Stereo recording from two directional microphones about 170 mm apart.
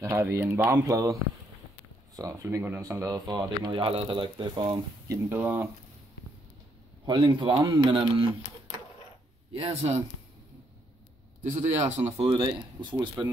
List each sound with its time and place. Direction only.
0.0 s speech: 15° right (ahead or behind)
2.1 s speech: 20° right (ahead or behind)
7.1 s speech: 25° right (ahead or behind)
9.6 s speech: 35° right (ahead or behind)
11.8 s speech: 45° right (ahead or behind)
12.2 s speech: 30° right (ahead or behind)